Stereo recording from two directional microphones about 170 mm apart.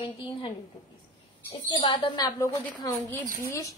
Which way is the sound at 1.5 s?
25° left (ahead or behind).